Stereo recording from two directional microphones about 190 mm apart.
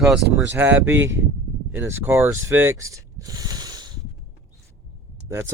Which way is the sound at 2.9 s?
15° right (ahead or behind).